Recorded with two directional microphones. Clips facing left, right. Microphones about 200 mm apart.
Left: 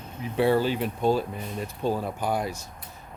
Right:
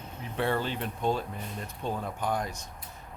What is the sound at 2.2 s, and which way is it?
Speech, 10° left (ahead or behind).